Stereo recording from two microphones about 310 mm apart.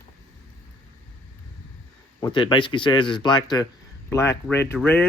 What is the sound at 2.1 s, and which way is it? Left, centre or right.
Speech, centre.